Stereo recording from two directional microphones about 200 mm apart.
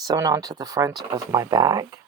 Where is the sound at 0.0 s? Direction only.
20° right (ahead or behind).